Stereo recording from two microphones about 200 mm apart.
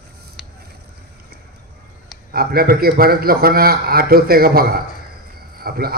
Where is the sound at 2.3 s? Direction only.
50° right (ahead or behind).